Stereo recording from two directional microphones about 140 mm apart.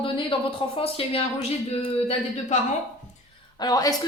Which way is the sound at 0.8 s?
40° left (ahead or behind).